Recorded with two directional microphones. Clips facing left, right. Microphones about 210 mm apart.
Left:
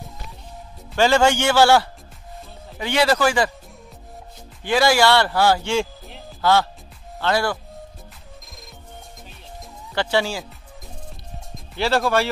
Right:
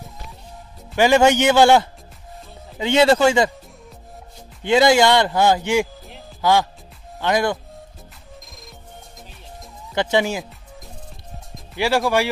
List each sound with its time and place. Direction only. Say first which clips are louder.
0.9 s speech: right 3 dB; 15° right (ahead or behind)
4.6 s speech: right 3 dB; 20° right (ahead or behind)
9.9 s speech: right 2 dB; 20° right (ahead or behind)
11.7 s speech: right 1 dB; 15° right (ahead or behind)